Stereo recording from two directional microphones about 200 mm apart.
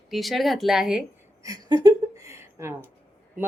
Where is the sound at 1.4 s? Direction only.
20° right (ahead or behind).